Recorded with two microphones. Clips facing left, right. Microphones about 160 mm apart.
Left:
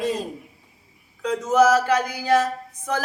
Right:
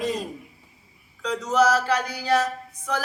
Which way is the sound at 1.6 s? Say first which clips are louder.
Left 3 dB; 50° left (ahead or behind).